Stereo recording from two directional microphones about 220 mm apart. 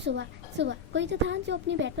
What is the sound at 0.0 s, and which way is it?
A woman's voice, 50° right (ahead or behind).